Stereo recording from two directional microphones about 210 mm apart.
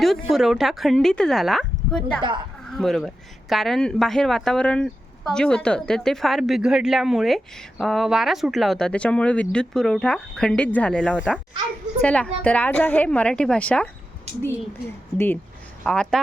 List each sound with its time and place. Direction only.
0.0 s speech: centre (ahead or behind)